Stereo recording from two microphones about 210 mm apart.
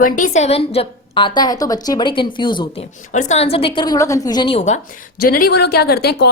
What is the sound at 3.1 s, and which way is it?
A woman's voice, 35° left (ahead or behind).